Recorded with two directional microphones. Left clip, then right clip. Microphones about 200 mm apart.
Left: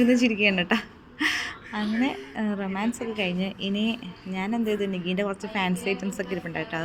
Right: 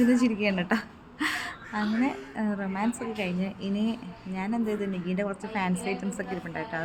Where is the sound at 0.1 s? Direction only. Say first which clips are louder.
Left 4 dB; 5° left (ahead or behind).